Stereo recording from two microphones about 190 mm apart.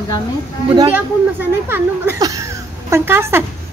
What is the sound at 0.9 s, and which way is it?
Speech, 10° right (ahead or behind).